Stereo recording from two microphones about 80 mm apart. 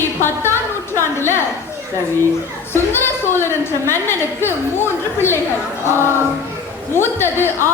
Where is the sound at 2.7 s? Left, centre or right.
Left.